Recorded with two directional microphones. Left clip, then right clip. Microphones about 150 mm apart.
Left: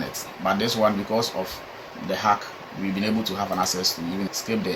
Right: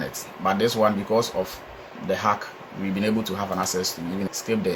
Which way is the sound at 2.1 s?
60° right (ahead or behind).